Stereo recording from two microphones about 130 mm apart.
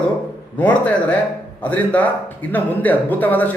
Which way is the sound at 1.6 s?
10° left (ahead or behind).